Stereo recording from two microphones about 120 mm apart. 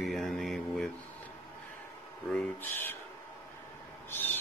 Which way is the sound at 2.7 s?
20° left (ahead or behind).